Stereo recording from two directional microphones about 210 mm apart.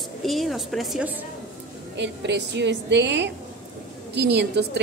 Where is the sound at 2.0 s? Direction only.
55° right (ahead or behind).